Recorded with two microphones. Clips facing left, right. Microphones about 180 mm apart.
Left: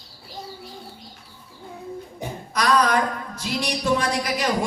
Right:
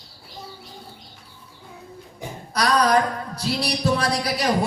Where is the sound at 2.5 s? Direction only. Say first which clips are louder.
Right 1 dB; 35° right (ahead or behind).